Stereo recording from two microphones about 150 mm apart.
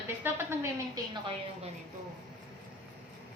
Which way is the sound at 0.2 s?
15° right (ahead or behind).